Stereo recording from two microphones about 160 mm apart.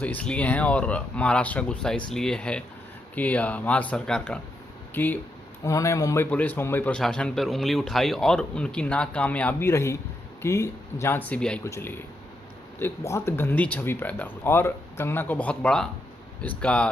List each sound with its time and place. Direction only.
0.0 s speech: 10° left (ahead or behind)